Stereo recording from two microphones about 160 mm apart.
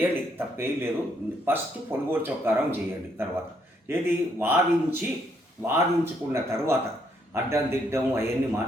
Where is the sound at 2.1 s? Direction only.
15° right (ahead or behind).